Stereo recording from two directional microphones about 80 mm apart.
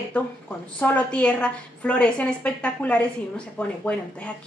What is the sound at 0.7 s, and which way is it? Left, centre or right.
Speech, centre.